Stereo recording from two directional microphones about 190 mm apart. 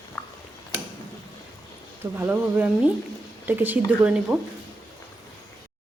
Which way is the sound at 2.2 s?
10° right (ahead or behind).